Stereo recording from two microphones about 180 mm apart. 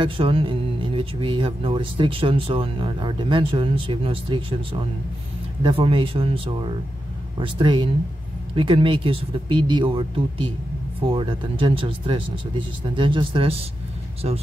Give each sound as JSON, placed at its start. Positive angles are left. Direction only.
{"t": 0.0, "sound": "speech", "side_deg": -30}